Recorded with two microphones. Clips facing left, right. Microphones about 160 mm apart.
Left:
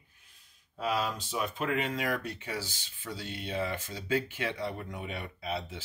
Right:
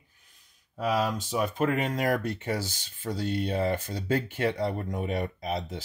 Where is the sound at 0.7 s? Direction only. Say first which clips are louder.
Right 4 dB; 45° right (ahead or behind).